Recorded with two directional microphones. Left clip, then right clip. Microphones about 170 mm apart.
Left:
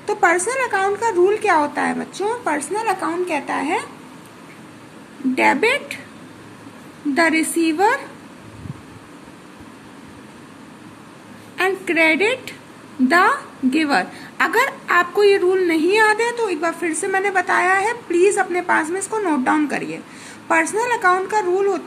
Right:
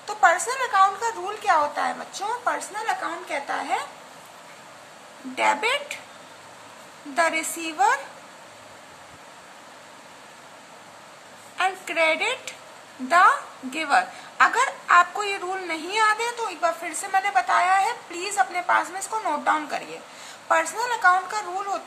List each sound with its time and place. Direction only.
0.0 s speech: 15° left (ahead or behind)
5.3 s speech: 10° left (ahead or behind)
7.2 s speech: 10° left (ahead or behind)
11.5 s a woman's voice: 10° left (ahead or behind)